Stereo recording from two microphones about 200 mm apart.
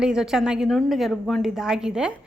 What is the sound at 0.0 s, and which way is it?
A woman's voice, 5° right (ahead or behind).